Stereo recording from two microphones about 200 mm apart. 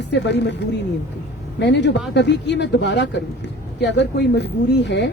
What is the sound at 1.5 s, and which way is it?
Speech, 60° left (ahead or behind).